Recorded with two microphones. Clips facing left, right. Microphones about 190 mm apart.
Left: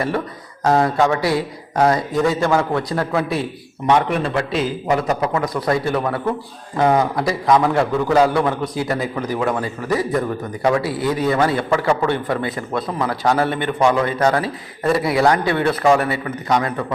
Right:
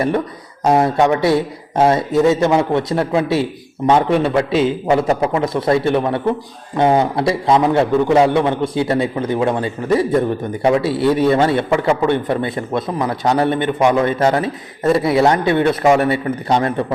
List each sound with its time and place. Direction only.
0.6 s a man's voice: 20° right (ahead or behind)